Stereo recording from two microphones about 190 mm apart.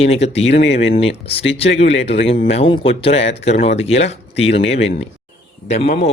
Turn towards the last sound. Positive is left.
turn(degrees=30)  # may be behind; listen again after turning